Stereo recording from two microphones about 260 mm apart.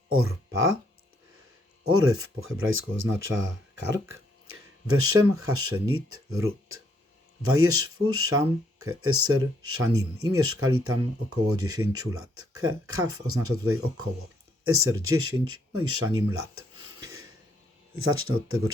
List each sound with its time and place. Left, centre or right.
0.1 s speech: right
1.8 s speech: right
16.3 s a sound: right
17.9 s speech: right